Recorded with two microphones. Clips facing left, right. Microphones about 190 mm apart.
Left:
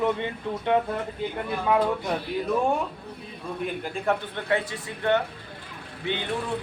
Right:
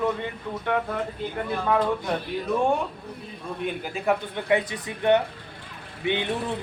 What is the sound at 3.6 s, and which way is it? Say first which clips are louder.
Speech: right 1 dB; centre (ahead or behind).